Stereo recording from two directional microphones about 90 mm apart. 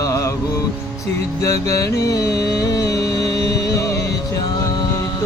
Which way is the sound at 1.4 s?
40° left (ahead or behind).